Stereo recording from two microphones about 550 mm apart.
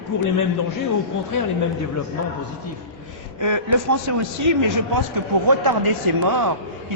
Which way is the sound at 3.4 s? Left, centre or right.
Right.